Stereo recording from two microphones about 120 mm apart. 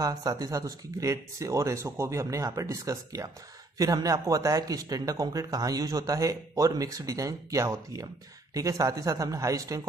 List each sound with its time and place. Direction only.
0.0 s speech: 30° right (ahead or behind)